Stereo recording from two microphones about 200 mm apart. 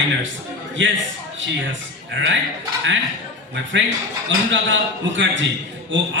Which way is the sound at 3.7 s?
65° right (ahead or behind).